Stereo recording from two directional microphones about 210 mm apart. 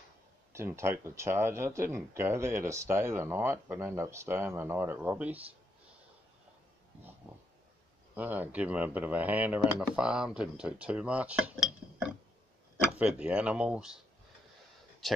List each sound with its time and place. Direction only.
0.5 s speech: 10° right (ahead or behind)
8.1 s speech: 10° right (ahead or behind)
12.9 s speech: 5° right (ahead or behind)